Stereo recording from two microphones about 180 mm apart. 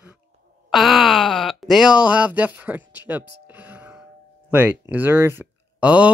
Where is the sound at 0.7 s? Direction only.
Centre (ahead or behind).